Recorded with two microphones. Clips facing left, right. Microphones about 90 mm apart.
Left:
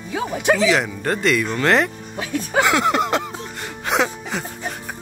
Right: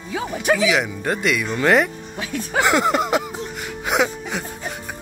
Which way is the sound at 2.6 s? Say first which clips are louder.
Even; 20° right (ahead or behind).